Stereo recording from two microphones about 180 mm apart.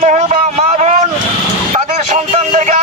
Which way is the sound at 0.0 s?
40° right (ahead or behind).